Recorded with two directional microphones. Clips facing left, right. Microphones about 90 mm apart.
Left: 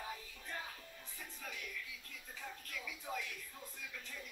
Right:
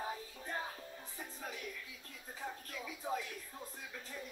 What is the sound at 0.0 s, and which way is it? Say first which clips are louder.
Music: right 5 dB; 30° right (ahead or behind).